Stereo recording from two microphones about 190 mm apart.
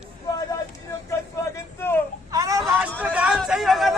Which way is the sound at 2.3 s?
20° right (ahead or behind).